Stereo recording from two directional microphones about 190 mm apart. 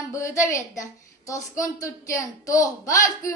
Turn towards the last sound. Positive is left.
turn(degrees=15)  # may be behind; listen again after turning